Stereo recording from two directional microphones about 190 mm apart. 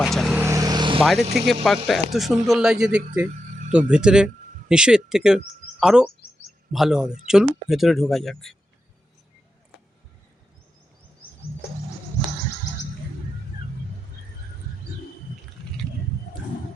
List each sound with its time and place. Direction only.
0.0 s vehicle: centre (ahead or behind)
0.3 s vehicle: 15° right (ahead or behind)
1.3 s speech: centre (ahead or behind)